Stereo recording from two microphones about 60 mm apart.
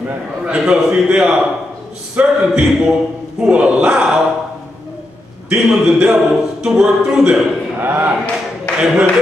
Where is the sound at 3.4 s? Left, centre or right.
Centre.